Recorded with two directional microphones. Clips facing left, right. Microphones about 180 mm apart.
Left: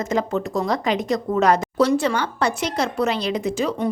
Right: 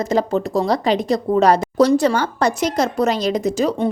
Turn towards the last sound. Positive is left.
turn(degrees=-40)  # may be behind; listen again after turning